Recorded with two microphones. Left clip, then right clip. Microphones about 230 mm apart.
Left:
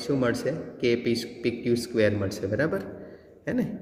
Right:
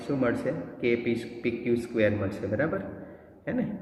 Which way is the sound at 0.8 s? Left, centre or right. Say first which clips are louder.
Left 3 dB; left.